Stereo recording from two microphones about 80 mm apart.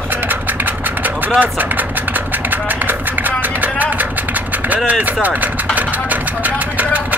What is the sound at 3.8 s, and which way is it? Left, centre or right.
Vehicle, right.